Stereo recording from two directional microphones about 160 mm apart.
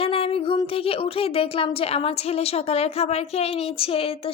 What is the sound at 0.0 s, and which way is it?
Speech, 35° left (ahead or behind).